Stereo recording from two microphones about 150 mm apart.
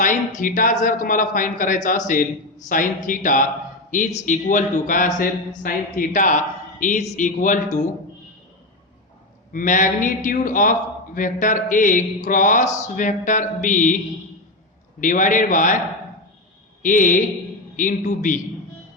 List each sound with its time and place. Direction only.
0.0 s a man's voice: 60° left (ahead or behind)
9.5 s a man's voice: 60° left (ahead or behind)
15.0 s a man's voice: 60° left (ahead or behind)
16.8 s a man's voice: 60° left (ahead or behind)